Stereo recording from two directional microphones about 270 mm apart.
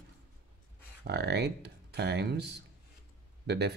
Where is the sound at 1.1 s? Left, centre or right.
Right.